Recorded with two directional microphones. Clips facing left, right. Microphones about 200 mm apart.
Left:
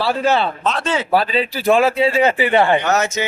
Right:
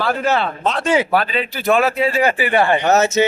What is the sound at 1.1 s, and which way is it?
Speech, 35° left (ahead or behind).